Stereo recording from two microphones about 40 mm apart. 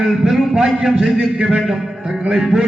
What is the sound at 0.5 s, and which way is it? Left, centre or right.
A man's voice, right.